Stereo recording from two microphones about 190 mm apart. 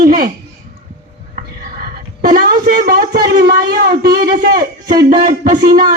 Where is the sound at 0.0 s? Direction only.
50° right (ahead or behind).